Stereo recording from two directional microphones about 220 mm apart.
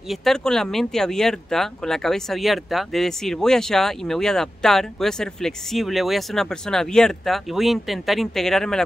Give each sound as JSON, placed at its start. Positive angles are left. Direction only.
{"t": 0.1, "sound": "speech", "side_deg": 0}